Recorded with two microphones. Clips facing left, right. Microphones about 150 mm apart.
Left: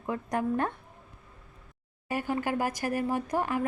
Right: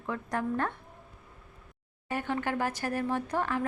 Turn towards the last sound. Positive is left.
turn(degrees=15)  # may be behind; listen again after turning